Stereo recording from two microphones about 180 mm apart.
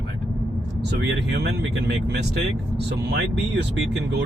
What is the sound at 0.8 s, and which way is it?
Speech, 70° right (ahead or behind).